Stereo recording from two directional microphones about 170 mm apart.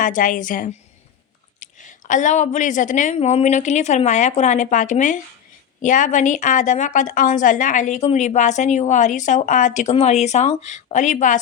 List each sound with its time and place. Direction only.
0.0 s a woman's voice: 50° left (ahead or behind)